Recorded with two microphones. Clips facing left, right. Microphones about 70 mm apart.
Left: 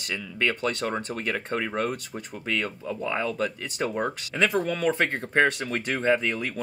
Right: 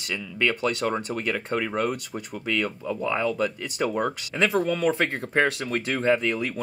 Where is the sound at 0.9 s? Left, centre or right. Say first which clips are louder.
Right 2 dB; centre.